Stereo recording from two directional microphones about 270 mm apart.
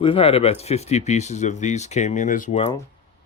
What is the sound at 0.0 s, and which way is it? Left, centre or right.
Speech, left.